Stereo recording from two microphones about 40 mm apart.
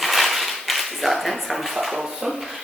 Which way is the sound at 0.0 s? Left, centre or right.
Centre.